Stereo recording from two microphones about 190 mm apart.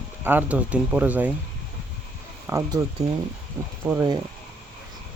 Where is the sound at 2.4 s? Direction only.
15° right (ahead or behind).